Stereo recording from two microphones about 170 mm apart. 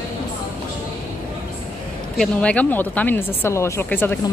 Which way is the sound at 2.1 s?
5° left (ahead or behind).